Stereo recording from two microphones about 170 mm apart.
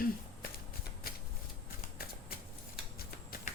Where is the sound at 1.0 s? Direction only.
60° left (ahead or behind).